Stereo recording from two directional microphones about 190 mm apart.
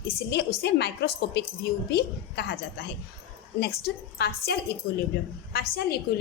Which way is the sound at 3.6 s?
60° left (ahead or behind).